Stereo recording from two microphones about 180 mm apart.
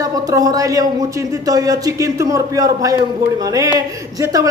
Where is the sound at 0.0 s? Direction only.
20° right (ahead or behind).